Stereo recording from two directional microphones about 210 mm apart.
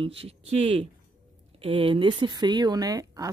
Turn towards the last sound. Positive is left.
turn(degrees=-15)  # may be behind; listen again after turning